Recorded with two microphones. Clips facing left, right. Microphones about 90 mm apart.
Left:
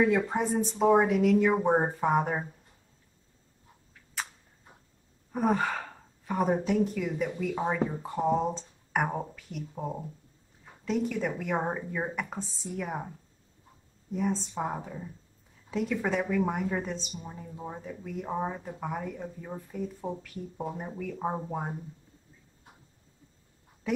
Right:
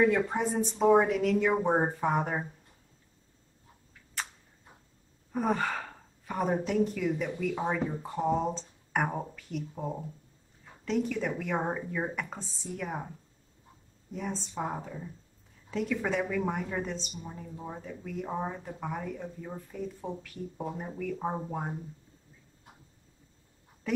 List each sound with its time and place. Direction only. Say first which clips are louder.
0.0 s a woman's voice: even; 5° left (ahead or behind)
4.2 s a sound: left 1 dB; 5° left (ahead or behind)
5.3 s a woman's voice: left 2 dB; 5° left (ahead or behind)
7.2 s speech: left 1 dB; 20° left (ahead or behind)
7.7 s a woman's voice: left 2 dB; 10° left (ahead or behind)
14.1 s a woman's voice: left 5 dB; centre (ahead or behind)
17.1 s a woman's voice: even; 20° left (ahead or behind)